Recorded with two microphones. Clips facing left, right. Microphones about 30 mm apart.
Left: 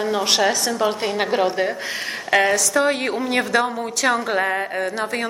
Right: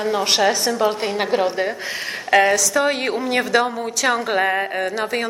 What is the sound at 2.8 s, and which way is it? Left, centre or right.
A woman's voice, centre.